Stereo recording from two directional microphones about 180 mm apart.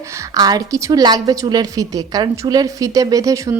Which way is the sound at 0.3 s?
20° right (ahead or behind).